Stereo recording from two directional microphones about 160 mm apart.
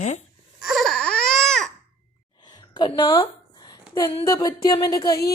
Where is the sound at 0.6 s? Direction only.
Centre (ahead or behind).